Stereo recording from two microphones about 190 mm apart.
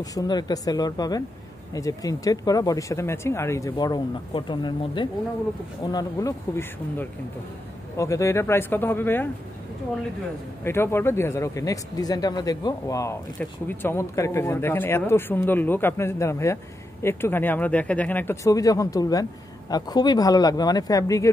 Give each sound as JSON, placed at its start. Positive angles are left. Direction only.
{"t": 0.0, "sound": "speech", "side_deg": 20}
{"t": 10.6, "sound": "speech", "side_deg": 15}